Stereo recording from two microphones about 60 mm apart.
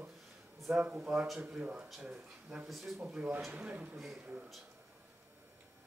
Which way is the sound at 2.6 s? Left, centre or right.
Centre.